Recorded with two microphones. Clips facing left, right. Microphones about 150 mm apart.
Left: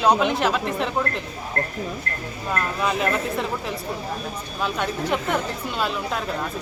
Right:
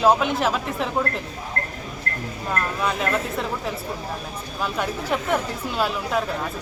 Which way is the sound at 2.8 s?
5° left (ahead or behind).